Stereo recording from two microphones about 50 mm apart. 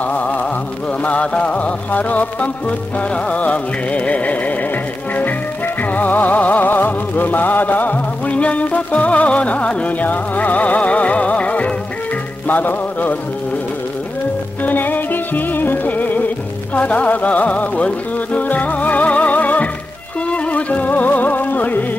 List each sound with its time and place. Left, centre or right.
0.0 s music: left
5.8 s music: left
14.6 s music: left